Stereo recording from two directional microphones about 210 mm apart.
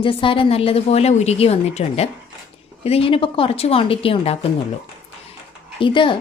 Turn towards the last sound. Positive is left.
turn(degrees=25)  # may be behind; listen again after turning